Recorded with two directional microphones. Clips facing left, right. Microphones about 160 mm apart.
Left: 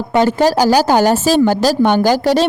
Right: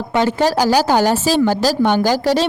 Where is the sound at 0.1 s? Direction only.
40° left (ahead or behind).